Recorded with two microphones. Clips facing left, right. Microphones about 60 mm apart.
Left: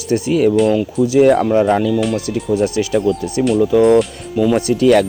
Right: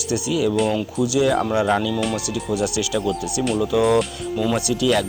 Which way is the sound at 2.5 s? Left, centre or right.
Left.